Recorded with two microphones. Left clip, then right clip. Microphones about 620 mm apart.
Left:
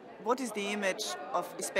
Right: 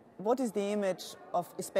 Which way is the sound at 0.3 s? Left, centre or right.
Right.